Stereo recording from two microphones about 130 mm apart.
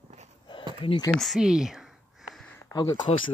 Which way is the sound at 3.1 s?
50° left (ahead or behind).